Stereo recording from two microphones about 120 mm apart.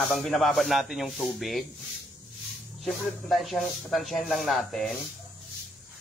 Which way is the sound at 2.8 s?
Centre (ahead or behind).